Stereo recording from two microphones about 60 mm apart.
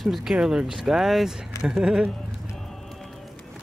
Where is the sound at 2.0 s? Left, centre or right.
Centre.